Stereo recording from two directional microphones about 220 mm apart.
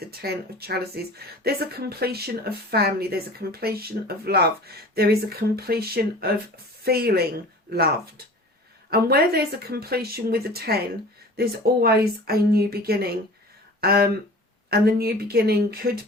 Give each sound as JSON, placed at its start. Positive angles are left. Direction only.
{"t": 0.2, "sound": "speech", "side_deg": -45}
{"t": 8.9, "sound": "speech", "side_deg": -45}